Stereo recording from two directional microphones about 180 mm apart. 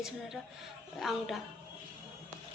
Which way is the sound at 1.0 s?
Centre (ahead or behind).